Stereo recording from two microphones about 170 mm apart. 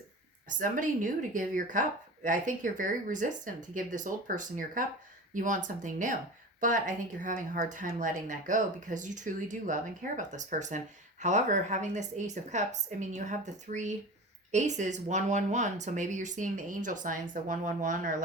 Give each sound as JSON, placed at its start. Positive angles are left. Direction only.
{"t": 0.4, "sound": "speech", "side_deg": -50}